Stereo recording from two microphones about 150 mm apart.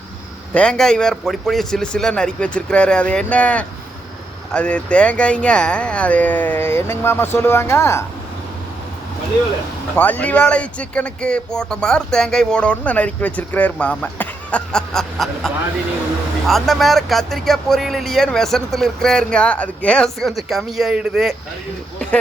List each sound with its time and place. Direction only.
0.5 s speech: 5° left (ahead or behind)
9.9 s speech: 10° left (ahead or behind)